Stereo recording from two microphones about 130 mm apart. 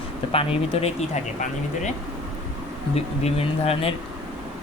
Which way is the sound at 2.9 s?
50° left (ahead or behind).